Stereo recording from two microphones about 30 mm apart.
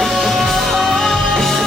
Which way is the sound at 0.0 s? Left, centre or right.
Centre.